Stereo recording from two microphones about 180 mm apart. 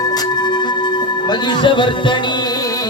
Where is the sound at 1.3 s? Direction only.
25° left (ahead or behind).